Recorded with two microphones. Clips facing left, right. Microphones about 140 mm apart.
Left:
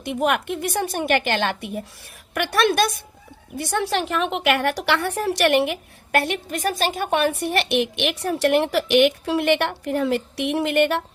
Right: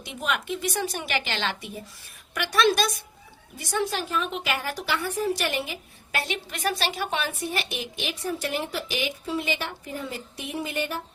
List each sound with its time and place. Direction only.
0.0 s a woman's voice: 60° left (ahead or behind)